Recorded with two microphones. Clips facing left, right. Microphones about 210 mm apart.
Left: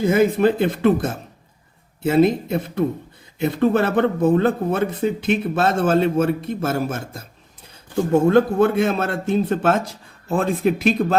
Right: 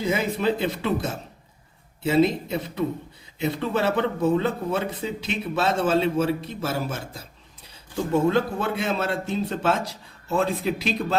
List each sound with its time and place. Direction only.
0.0 s speech: 50° left (ahead or behind)